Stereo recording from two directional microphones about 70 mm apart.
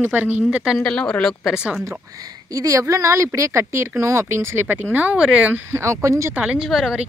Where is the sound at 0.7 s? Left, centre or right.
Centre.